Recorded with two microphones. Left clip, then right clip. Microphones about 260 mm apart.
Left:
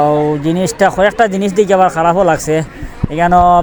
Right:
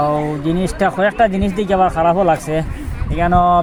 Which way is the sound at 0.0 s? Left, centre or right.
Left.